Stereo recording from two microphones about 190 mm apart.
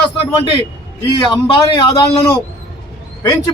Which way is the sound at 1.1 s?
25° left (ahead or behind).